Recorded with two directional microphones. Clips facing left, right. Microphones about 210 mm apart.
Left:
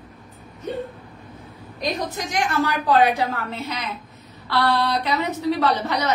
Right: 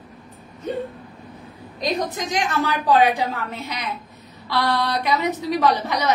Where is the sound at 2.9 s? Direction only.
15° right (ahead or behind).